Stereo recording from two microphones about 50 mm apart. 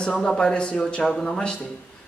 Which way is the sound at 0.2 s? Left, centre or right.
Centre.